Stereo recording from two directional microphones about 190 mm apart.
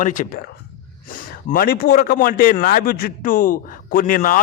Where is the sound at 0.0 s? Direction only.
45° left (ahead or behind).